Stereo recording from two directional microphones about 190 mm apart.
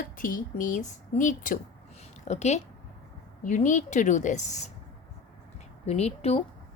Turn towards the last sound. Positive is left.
turn(degrees=30)  # may be behind; listen again after turning